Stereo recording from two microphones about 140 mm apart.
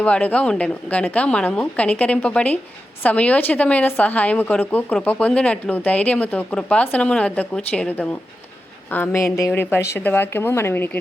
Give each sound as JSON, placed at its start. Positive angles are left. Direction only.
{"t": 0.0, "sound": "a woman's voice", "side_deg": 10}